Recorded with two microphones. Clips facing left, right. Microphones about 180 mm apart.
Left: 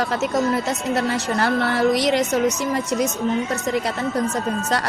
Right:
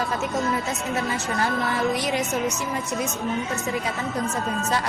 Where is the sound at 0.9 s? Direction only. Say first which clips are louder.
Left 4 dB; 70° left (ahead or behind).